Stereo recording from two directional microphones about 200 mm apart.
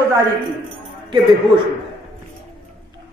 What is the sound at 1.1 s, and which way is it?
Speech, 25° right (ahead or behind).